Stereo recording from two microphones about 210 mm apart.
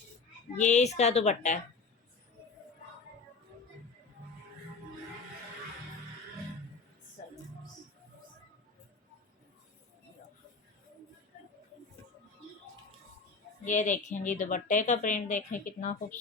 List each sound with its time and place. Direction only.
0.5 s a woman's voice: 35° left (ahead or behind)
7.2 s music: 35° left (ahead or behind)
13.7 s a woman's voice: 35° left (ahead or behind)